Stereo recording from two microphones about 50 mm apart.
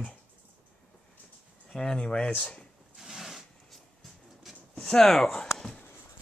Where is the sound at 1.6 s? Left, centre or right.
Centre.